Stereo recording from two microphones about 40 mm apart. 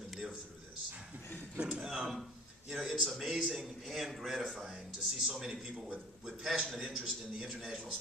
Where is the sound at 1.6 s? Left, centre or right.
Centre.